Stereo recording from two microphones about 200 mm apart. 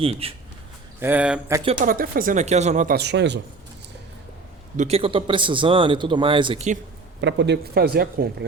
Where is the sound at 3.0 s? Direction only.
60° right (ahead or behind).